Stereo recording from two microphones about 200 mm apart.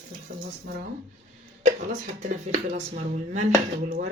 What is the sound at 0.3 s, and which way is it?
Speech, 45° right (ahead or behind).